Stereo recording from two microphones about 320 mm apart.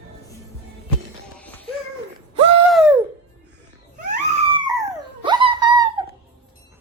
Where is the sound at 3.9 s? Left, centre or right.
Centre.